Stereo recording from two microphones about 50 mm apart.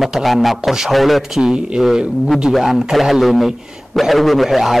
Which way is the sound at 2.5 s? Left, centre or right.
Centre.